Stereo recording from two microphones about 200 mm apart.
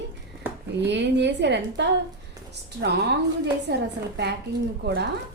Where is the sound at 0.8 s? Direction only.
60° right (ahead or behind).